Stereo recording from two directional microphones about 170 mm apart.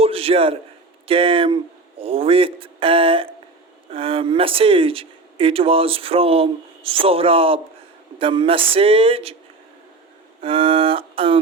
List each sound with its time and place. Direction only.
0.0 s a sound: 35° right (ahead or behind)
1.0 s speech: 30° right (ahead or behind)
10.4 s speech: 30° right (ahead or behind)